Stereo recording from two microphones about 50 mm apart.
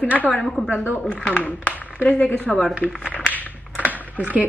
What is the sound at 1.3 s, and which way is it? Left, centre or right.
Speech, left.